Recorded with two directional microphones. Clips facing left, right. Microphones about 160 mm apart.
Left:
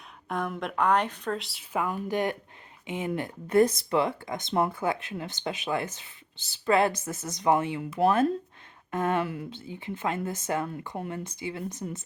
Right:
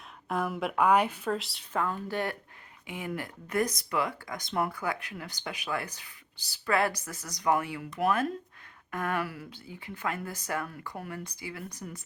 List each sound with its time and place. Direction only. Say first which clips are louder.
0.3 s speech: right 1 dB; 5° right (ahead or behind)
1.7 s speech: left 3 dB; 15° left (ahead or behind)